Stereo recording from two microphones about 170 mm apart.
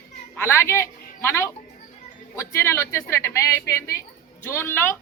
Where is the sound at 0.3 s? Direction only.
15° left (ahead or behind).